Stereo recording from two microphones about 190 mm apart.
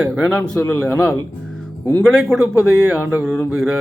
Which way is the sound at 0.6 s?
10° left (ahead or behind).